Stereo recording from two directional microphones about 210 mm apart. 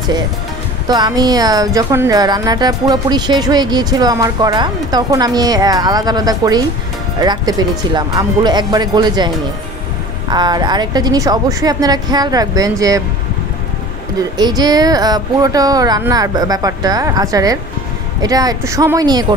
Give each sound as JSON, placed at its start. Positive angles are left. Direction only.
{"t": 0.8, "sound": "a woman's voice", "side_deg": -20}
{"t": 10.3, "sound": "a woman's voice", "side_deg": -20}
{"t": 14.3, "sound": "speech", "side_deg": -20}